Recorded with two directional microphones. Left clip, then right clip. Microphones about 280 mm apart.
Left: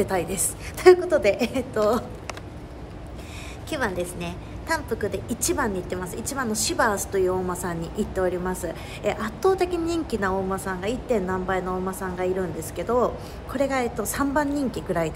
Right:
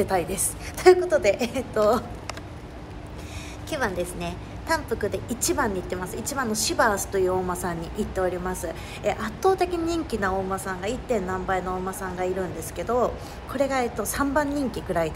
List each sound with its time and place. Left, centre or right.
0.0 s a woman's voice: centre
3.7 s a woman's voice: centre